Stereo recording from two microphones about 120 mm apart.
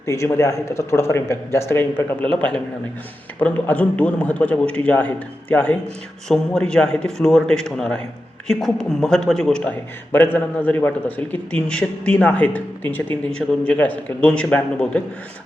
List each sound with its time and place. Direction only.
0.0 s speech: 25° left (ahead or behind)
2.3 s a man's voice: 10° left (ahead or behind)